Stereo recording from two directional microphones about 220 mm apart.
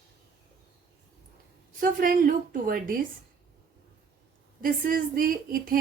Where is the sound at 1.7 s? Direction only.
40° right (ahead or behind).